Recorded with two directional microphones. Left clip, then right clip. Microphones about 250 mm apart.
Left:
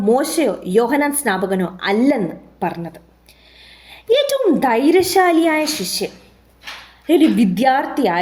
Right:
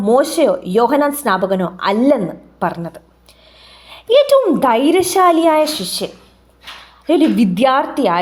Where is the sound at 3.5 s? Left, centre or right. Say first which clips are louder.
Right 2 dB; right.